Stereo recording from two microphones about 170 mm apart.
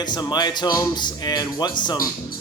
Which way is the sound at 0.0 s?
25° left (ahead or behind).